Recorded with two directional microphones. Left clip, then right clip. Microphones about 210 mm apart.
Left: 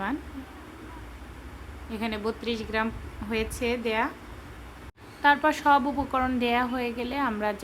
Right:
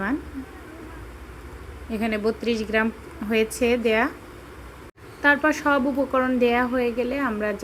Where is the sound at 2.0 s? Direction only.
15° right (ahead or behind).